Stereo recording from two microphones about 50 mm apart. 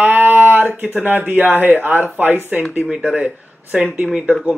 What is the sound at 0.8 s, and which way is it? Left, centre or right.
Speech, right.